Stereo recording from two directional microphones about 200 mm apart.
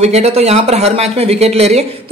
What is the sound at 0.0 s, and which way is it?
Speech, 30° right (ahead or behind).